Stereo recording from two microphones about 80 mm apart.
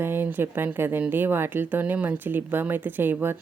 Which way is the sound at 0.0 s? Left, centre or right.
Right.